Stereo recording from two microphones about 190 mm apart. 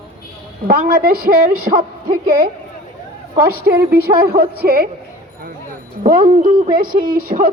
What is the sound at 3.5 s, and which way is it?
A woman's voice, 55° right (ahead or behind).